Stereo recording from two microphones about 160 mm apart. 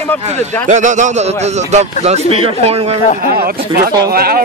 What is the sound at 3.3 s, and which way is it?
Speech, 75° right (ahead or behind).